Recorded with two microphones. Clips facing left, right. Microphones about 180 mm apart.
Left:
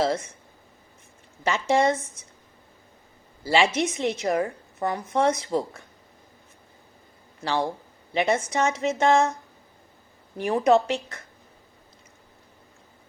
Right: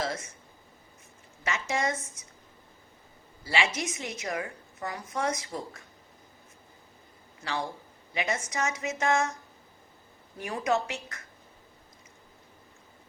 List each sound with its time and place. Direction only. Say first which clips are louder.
1.5 s a woman's voice: left 9 dB; 30° left (ahead or behind)
3.4 s a woman's voice: left 8 dB; 30° left (ahead or behind)
7.4 s a woman's voice: left 8 dB; 30° left (ahead or behind)
10.4 s a woman's voice: left 9 dB; 30° left (ahead or behind)